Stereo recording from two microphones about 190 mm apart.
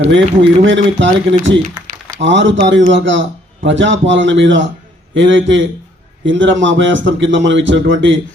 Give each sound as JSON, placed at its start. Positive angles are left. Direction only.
{"t": 0.1, "sound": "a man's voice", "side_deg": -75}
{"t": 2.2, "sound": "a man's voice", "side_deg": -75}